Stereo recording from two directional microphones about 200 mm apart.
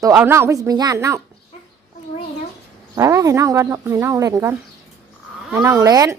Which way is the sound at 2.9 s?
15° right (ahead or behind).